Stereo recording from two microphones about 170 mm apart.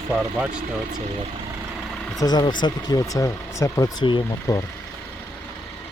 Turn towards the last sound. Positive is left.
turn(degrees=25)  # may be behind; listen again after turning